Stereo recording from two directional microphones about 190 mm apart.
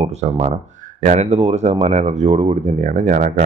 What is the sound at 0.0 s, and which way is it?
Speech, 35° right (ahead or behind).